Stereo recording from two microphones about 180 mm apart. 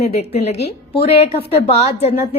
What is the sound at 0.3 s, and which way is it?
A woman's voice, 35° left (ahead or behind).